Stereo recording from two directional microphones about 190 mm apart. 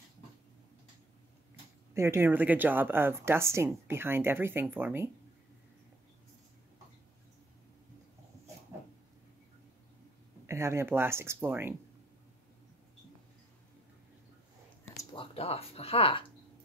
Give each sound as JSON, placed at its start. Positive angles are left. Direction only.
{"t": 2.0, "sound": "speech", "side_deg": -15}
{"t": 10.4, "sound": "speech", "side_deg": -15}
{"t": 15.1, "sound": "speech", "side_deg": 30}